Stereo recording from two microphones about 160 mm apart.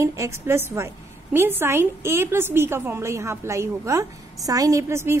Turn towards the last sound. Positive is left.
turn(degrees=-15)  # may be behind; listen again after turning